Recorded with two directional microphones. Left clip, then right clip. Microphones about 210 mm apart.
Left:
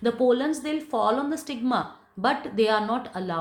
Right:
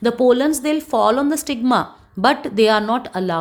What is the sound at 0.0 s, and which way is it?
A woman's voice, 50° right (ahead or behind).